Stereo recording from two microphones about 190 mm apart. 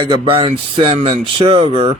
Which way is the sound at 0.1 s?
30° right (ahead or behind).